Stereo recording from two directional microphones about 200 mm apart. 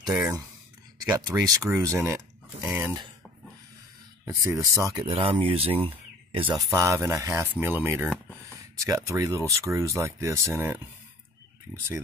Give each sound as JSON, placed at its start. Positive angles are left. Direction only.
{"t": 0.1, "sound": "speech", "side_deg": -10}
{"t": 4.3, "sound": "speech", "side_deg": -15}
{"t": 5.0, "sound": "speech", "side_deg": -25}
{"t": 6.4, "sound": "speech", "side_deg": -10}